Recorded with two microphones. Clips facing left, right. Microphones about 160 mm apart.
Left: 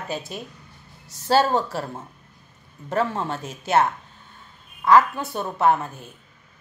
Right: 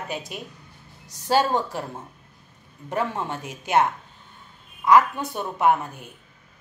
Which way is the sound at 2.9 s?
15° right (ahead or behind).